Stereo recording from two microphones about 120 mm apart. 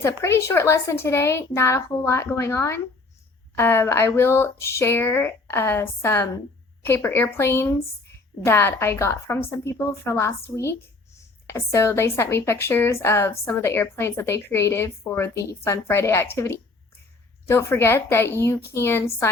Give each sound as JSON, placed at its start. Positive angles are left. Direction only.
{"t": 0.0, "sound": "speech", "side_deg": 20}